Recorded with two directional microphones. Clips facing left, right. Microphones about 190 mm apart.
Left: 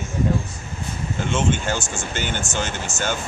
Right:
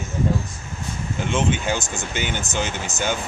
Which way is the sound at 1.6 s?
15° right (ahead or behind).